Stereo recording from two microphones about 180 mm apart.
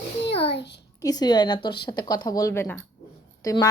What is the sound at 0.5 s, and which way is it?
Child singing, 70° left (ahead or behind).